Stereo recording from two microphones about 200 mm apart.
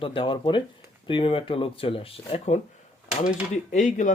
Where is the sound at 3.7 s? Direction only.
40° left (ahead or behind).